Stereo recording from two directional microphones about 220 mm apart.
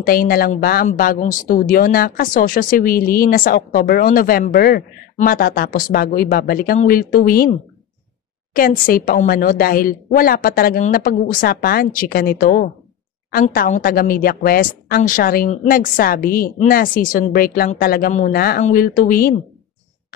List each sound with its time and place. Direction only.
0.0 s a woman's voice: 40° left (ahead or behind)
8.5 s a woman's voice: 40° left (ahead or behind)